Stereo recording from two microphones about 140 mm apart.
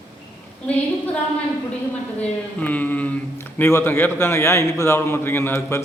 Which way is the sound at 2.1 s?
10° left (ahead or behind).